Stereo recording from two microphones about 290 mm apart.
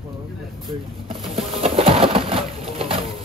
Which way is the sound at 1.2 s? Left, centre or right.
Centre.